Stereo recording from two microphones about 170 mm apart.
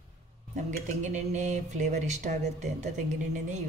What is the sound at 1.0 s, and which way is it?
A woman's voice, 45° right (ahead or behind).